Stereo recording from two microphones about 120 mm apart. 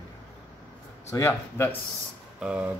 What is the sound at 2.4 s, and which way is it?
Speech, 10° right (ahead or behind).